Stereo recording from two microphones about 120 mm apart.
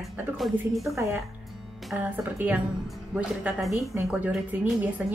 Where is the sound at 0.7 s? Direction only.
Centre (ahead or behind).